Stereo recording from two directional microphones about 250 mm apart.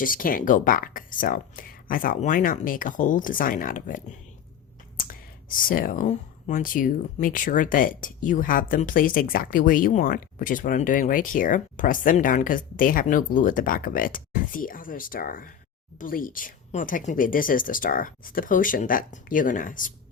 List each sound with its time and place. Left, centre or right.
0.0 s speech: left